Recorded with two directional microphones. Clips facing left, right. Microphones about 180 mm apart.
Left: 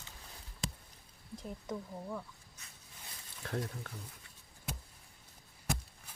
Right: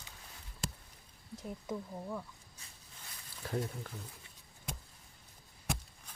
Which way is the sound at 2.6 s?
30° right (ahead or behind).